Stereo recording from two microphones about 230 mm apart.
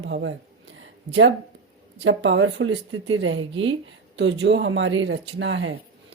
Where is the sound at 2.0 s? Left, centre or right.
Right.